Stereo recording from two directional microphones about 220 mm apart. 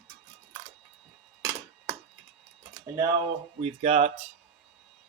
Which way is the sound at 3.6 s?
25° right (ahead or behind).